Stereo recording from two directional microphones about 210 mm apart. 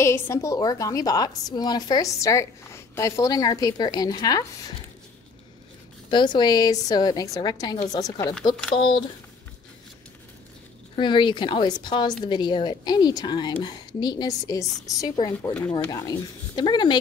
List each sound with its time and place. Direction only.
0.0 s a woman's voice: 15° left (ahead or behind)
6.0 s a woman's voice: 20° left (ahead or behind)
11.0 s a woman's voice: 20° left (ahead or behind)